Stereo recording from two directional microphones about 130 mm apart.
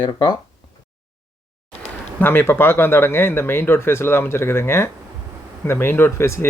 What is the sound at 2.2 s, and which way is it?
Speech, 15° left (ahead or behind).